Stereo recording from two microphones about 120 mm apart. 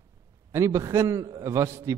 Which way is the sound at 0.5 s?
25° right (ahead or behind).